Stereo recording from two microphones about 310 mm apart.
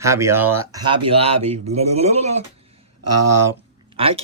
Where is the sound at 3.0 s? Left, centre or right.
Right.